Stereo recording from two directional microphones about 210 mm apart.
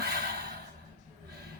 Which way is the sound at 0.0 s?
50° right (ahead or behind).